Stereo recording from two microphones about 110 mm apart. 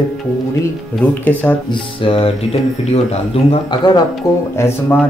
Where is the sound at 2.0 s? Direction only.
55° left (ahead or behind).